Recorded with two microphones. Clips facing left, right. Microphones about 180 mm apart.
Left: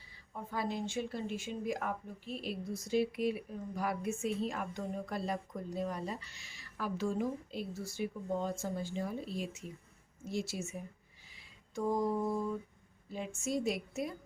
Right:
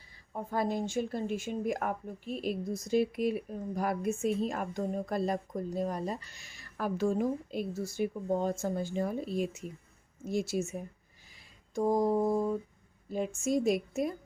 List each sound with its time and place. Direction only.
0.3 s speech: 45° right (ahead or behind)
11.3 s a sound: 40° right (ahead or behind)
13.1 s speech: 45° right (ahead or behind)